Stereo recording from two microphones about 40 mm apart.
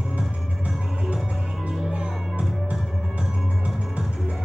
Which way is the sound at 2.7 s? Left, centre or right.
Right.